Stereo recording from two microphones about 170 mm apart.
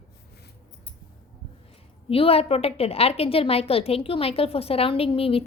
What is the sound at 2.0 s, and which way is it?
A woman's voice, 35° left (ahead or behind).